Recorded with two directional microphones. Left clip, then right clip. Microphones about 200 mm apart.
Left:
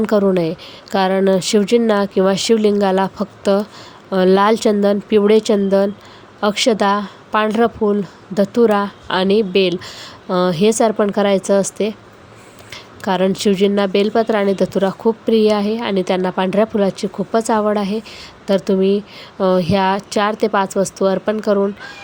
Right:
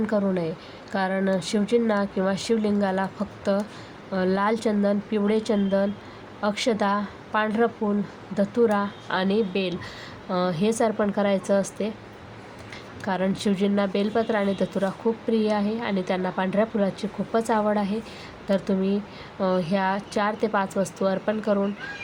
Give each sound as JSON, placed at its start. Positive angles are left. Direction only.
{"t": 0.0, "sound": "a woman's voice", "side_deg": 45}